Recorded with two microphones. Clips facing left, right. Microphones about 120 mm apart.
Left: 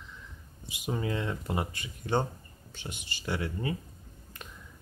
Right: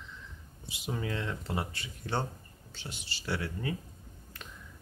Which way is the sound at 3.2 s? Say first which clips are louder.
Left 2 dB; 15° left (ahead or behind).